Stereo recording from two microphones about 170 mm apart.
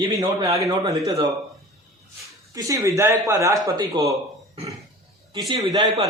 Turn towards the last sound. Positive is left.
turn(degrees=-25)  # may be behind; listen again after turning